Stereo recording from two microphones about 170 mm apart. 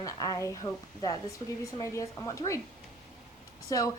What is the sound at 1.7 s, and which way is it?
Speech, 20° left (ahead or behind).